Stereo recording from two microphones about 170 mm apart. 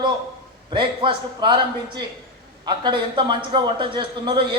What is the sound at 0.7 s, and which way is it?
A man's voice, 30° right (ahead or behind).